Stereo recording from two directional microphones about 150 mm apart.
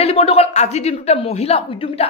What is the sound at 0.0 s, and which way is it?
A woman's voice, 40° left (ahead or behind).